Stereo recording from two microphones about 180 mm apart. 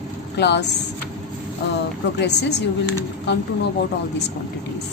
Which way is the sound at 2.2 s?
70° left (ahead or behind).